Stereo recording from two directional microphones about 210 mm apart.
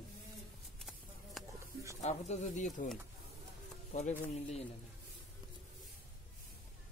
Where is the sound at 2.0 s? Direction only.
35° left (ahead or behind).